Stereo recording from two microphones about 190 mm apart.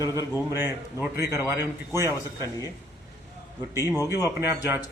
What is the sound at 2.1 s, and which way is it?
Speech, 15° left (ahead or behind).